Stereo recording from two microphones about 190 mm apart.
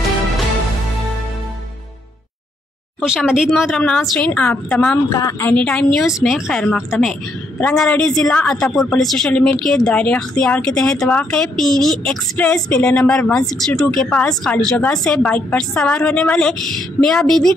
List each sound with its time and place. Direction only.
3.0 s speech: centre (ahead or behind)
5.1 s speech: 20° left (ahead or behind)
5.5 s speech: 5° left (ahead or behind)